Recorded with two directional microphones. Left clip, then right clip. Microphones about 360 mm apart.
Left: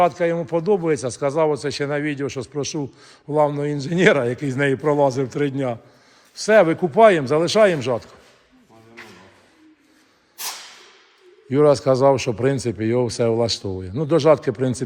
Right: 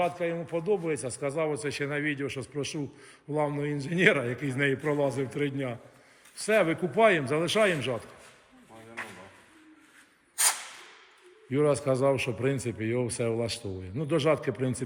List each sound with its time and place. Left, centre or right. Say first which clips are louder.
0.2 s a man's voice: left 11 dB; left
0.4 s speech: left 9 dB; centre
11.5 s speech: left 10 dB; centre